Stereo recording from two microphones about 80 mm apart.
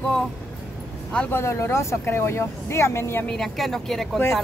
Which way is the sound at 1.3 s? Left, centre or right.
Left.